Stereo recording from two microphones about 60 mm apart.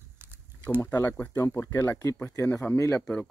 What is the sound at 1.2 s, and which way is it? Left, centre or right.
Speech, left.